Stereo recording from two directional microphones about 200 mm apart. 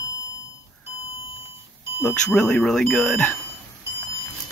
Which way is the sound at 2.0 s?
5° left (ahead or behind).